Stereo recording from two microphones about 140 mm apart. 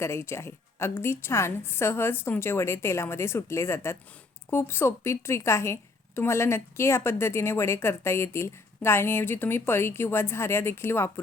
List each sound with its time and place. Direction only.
0.0 s a woman's voice: 20° left (ahead or behind)